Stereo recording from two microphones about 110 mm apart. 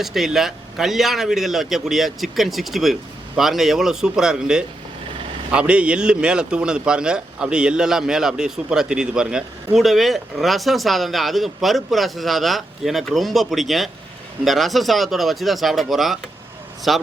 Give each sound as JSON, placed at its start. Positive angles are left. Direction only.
{"t": 0.0, "sound": "a man's voice", "side_deg": -5}